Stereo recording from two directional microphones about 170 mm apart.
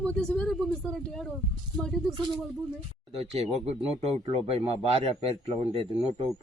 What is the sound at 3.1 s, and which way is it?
A man's voice, 40° right (ahead or behind).